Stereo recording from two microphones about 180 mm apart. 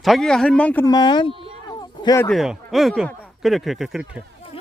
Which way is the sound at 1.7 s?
20° left (ahead or behind).